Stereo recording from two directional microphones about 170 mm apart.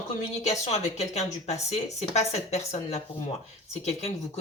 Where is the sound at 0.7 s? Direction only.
40° left (ahead or behind).